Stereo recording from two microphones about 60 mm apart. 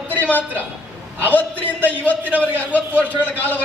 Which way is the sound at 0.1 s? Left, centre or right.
Left.